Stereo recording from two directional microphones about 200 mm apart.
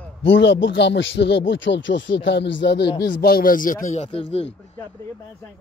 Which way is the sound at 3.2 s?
45° left (ahead or behind).